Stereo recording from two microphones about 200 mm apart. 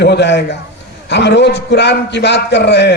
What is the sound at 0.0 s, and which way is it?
A man's voice, 60° left (ahead or behind).